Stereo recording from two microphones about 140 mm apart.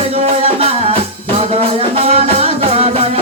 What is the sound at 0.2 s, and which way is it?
Music, 45° right (ahead or behind).